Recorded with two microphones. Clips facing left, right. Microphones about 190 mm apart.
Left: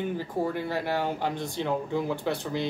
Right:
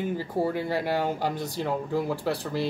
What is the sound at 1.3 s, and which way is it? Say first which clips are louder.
Speech: right 1 dB; 40° right (ahead or behind).